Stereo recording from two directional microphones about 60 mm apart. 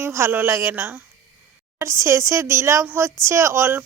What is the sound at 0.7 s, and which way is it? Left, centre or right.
Speech, right.